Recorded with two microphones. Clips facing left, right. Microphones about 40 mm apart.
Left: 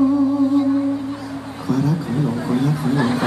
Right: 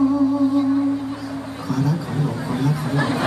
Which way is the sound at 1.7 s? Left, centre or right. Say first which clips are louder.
Left 3 dB; centre.